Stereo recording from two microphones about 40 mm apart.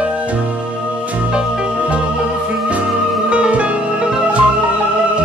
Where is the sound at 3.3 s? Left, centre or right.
Right.